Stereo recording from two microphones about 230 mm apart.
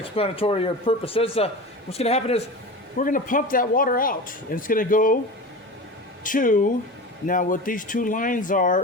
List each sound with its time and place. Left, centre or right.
0.0 s speech: left
6.2 s speech: left